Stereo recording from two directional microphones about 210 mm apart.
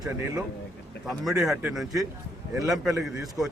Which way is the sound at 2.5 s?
15° right (ahead or behind).